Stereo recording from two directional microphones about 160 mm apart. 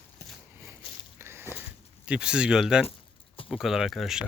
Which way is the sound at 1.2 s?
15° right (ahead or behind).